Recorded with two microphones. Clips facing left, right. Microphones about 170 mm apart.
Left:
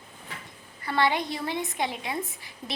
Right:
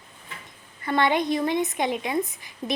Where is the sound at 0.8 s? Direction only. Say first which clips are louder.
Right 3 dB; 20° right (ahead or behind).